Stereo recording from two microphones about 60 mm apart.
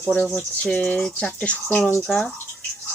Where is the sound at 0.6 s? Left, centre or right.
Centre.